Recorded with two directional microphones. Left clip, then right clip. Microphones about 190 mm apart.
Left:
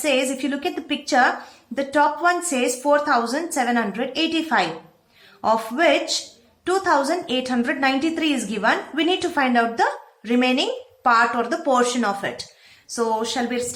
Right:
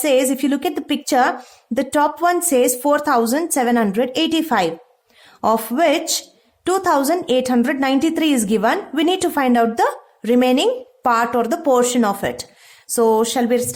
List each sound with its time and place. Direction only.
0.0 s a woman's voice: 50° right (ahead or behind)